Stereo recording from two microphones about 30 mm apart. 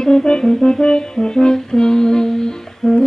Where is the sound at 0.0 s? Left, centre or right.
Left.